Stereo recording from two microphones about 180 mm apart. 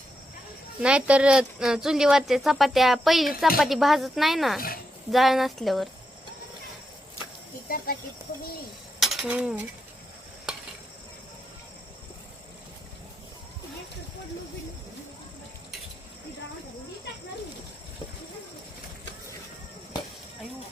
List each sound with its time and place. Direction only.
0.8 s speech: 5° right (ahead or behind)
7.7 s speech: 55° left (ahead or behind)
9.0 s a sound: centre (ahead or behind)